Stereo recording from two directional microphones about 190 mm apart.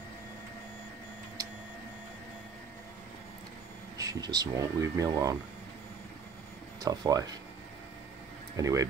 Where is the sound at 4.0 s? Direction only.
20° right (ahead or behind).